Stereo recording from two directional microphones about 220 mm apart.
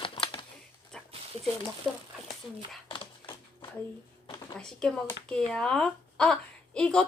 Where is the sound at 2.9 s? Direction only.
20° left (ahead or behind).